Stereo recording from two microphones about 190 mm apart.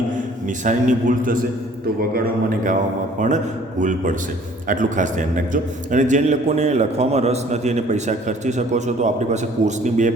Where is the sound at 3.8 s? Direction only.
40° right (ahead or behind).